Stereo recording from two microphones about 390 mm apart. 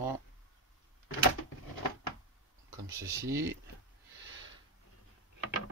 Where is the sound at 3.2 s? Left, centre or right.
Centre.